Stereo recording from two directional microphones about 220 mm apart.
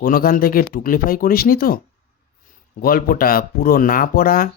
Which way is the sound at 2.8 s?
40° left (ahead or behind).